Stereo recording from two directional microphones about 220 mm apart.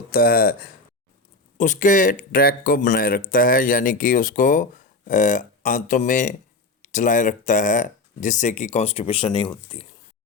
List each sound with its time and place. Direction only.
0.1 s speech: 40° left (ahead or behind); by 9.8 s 25° left (ahead or behind)